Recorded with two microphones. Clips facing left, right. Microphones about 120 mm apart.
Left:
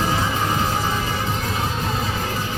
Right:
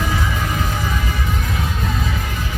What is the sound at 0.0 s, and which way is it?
Music, 30° left (ahead or behind).